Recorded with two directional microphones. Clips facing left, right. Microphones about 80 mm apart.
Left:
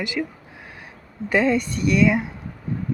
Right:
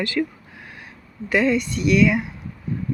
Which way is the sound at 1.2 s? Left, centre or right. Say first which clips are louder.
Even; left.